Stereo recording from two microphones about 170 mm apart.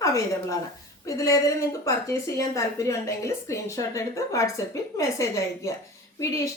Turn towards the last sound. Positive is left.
turn(degrees=20)  # may be behind; listen again after turning